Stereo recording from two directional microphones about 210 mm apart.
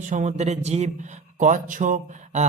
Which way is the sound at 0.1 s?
35° right (ahead or behind).